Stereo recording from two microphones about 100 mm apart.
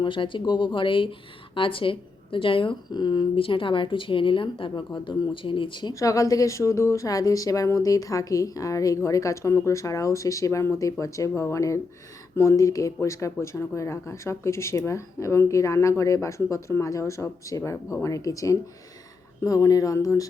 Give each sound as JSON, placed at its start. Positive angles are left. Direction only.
{"t": 0.0, "sound": "a woman's voice", "side_deg": 55}
{"t": 4.7, "sound": "a woman's voice", "side_deg": 40}
{"t": 5.3, "sound": "a woman's voice", "side_deg": 60}
{"t": 5.9, "sound": "a woman's voice", "side_deg": 35}